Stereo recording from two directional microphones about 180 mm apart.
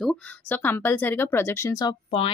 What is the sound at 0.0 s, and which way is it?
Speech, 5° left (ahead or behind).